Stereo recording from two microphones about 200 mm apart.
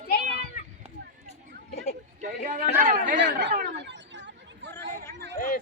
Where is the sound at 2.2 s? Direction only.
40° right (ahead or behind).